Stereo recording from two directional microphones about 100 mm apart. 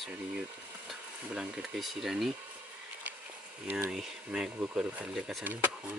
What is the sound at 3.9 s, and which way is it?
Speech, 5° right (ahead or behind).